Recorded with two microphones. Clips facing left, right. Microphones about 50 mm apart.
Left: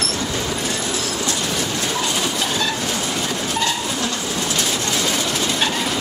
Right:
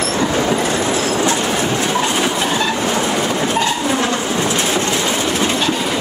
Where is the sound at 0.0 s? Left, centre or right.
Right.